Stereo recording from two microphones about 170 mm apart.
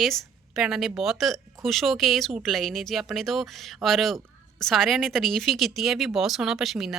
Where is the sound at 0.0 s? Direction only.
Centre (ahead or behind).